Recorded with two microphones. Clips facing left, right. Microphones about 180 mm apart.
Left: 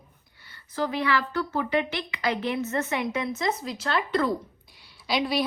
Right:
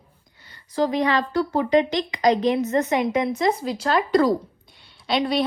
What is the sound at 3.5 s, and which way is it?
Speech, 30° right (ahead or behind).